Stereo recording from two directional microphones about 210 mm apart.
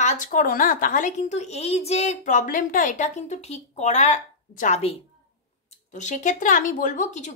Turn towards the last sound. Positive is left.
turn(degrees=35)  # may be behind; listen again after turning